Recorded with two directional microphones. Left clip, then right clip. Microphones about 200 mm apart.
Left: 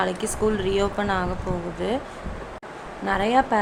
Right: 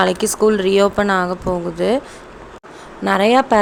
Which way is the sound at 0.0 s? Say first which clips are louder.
Right 9 dB; 35° right (ahead or behind).